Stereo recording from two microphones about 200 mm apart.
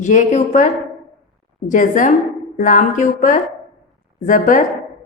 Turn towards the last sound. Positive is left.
turn(degrees=40)  # may be behind; listen again after turning